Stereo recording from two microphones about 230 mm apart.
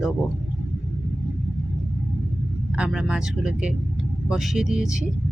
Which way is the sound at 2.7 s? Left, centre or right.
Centre.